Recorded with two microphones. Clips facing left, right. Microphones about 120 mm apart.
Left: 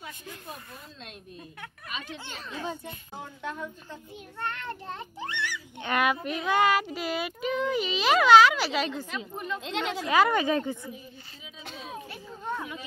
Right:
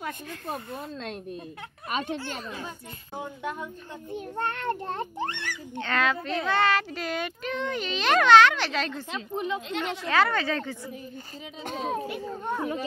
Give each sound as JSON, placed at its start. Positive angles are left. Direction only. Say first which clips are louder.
{"t": 1.9, "sound": "speech", "louder": "right 10 dB", "side_deg": -55}
{"t": 3.2, "sound": "speech", "louder": "right 3 dB", "side_deg": -10}
{"t": 4.1, "sound": "a child's voice", "louder": "right 6 dB", "side_deg": -50}
{"t": 5.8, "sound": "speech", "louder": "even", "side_deg": 15}
{"t": 9.1, "sound": "a child's voice", "louder": "right 4 dB", "side_deg": -20}
{"t": 10.0, "sound": "speech", "louder": "left 2 dB", "side_deg": 10}
{"t": 11.6, "sound": "a child's voice", "louder": "right 10 dB", "side_deg": -50}
{"t": 12.1, "sound": "a child's voice", "louder": "right 4 dB", "side_deg": -20}